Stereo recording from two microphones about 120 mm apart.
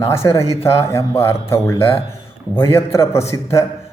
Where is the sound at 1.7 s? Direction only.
50° left (ahead or behind).